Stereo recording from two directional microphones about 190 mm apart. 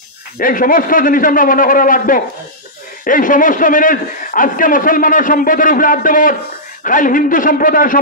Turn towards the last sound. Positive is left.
turn(degrees=45)  # may be behind; listen again after turning